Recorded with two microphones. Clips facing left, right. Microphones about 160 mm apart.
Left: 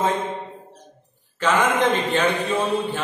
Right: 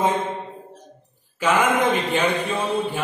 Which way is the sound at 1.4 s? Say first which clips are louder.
Even; 10° right (ahead or behind).